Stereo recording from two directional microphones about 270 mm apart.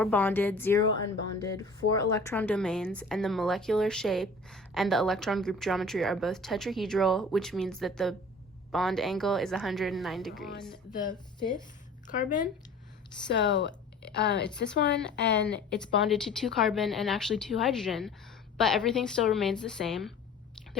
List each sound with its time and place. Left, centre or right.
0.0 s speech: centre
11.3 s speech: centre
12.0 s speech: left
14.2 s speech: left
15.4 s speech: centre